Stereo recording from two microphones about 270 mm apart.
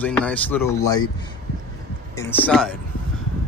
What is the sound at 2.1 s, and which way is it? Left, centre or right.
Speech, centre.